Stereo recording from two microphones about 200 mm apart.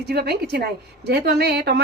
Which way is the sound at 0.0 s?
55° right (ahead or behind).